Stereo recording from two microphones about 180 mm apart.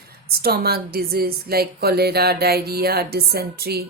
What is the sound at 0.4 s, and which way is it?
Speech, 60° right (ahead or behind).